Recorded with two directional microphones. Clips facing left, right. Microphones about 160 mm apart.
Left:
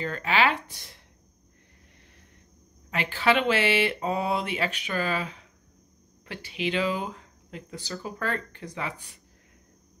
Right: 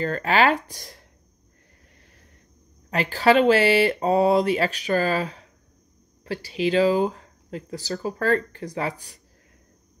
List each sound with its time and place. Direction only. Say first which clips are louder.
0.0 s speech: right 5 dB; 45° right (ahead or behind)
2.9 s speech: right 6 dB; 40° right (ahead or behind)